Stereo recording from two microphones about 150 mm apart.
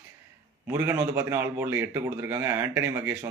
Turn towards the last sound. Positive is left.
turn(degrees=-15)  # may be behind; listen again after turning